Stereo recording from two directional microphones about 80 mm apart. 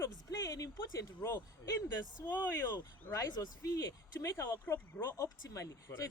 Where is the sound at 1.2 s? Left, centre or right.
Left.